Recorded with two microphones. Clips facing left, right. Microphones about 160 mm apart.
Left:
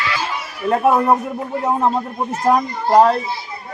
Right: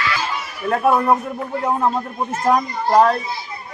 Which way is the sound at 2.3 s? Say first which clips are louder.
Left 1 dB; 15° left (ahead or behind).